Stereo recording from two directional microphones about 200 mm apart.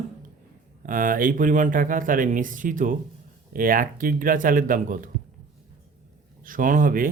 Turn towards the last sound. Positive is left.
turn(degrees=-45)  # may be behind; listen again after turning